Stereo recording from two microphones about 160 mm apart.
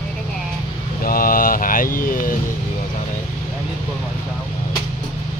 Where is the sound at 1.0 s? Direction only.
65° left (ahead or behind).